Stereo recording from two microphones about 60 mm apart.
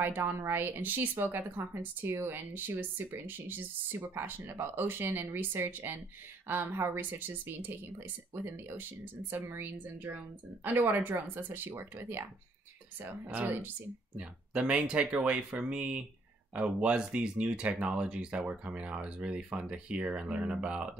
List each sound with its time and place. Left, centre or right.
0.0 s speech: right
13.3 s speech: right
14.1 s speech: centre